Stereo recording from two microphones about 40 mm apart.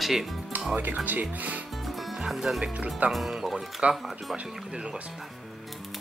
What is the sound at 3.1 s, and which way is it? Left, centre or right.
Speech, centre.